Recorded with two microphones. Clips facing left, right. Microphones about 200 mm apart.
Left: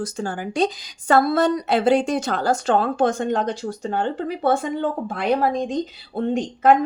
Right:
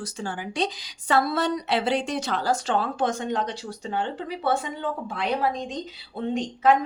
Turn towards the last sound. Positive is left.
turn(degrees=50)  # may be behind; listen again after turning